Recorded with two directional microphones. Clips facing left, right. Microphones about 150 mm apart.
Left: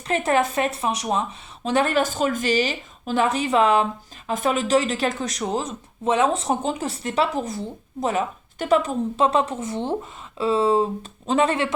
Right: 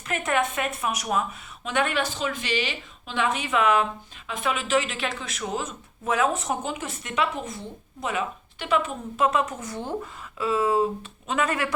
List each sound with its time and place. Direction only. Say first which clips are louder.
0.1 s a woman's voice: left 5 dB; 30° left (ahead or behind)